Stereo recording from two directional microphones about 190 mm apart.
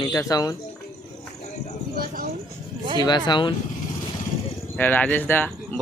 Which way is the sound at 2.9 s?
25° left (ahead or behind).